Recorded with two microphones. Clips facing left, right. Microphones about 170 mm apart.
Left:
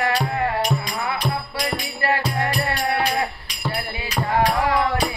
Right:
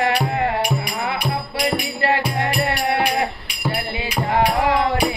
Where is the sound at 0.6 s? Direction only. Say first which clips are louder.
Right 1 dB; 10° right (ahead or behind).